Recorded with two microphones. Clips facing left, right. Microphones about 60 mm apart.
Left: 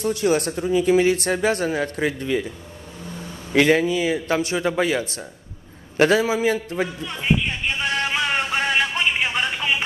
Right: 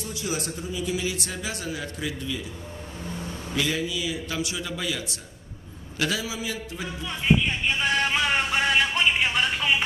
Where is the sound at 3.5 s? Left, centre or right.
Left.